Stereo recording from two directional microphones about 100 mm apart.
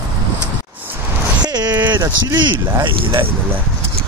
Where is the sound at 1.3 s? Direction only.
45° right (ahead or behind).